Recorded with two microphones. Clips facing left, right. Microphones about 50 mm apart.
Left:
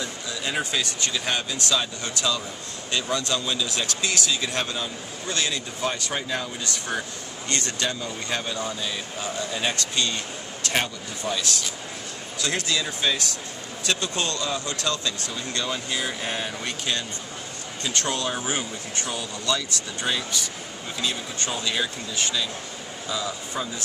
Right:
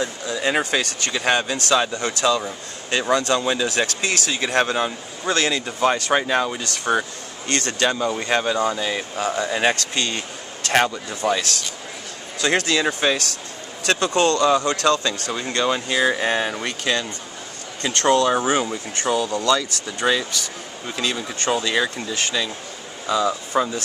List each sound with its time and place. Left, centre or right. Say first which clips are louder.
0.0 s speech: right 7 dB; right
7.4 s speech: right 6 dB; right
10.7 s speech: right 8 dB; right
13.8 s speech: right 8 dB; right
15.5 s speech: right 8 dB; right
17.9 s speech: right 11 dB; right
20.9 s speech: right 4 dB; right
23.0 s speech: right 9 dB; right